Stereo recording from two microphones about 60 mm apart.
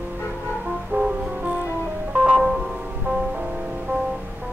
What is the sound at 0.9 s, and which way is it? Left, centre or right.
Music, right.